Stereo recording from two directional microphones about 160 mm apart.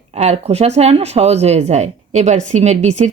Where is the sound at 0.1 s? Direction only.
40° right (ahead or behind).